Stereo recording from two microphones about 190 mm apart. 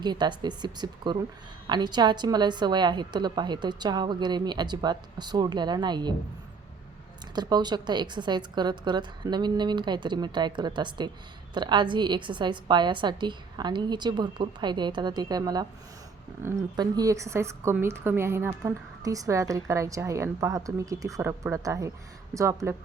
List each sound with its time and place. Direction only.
0.0 s a woman's voice: 20° right (ahead or behind)
7.3 s a woman's voice: 20° right (ahead or behind)